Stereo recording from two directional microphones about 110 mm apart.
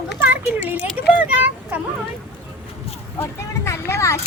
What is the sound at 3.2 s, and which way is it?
Speech, 25° left (ahead or behind).